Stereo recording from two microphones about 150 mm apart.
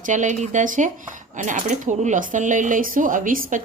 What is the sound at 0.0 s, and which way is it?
Speech, 55° right (ahead or behind).